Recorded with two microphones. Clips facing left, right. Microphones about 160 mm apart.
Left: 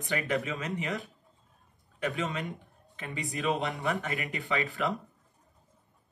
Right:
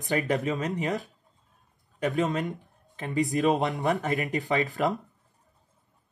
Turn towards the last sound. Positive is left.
turn(degrees=-40)  # may be behind; listen again after turning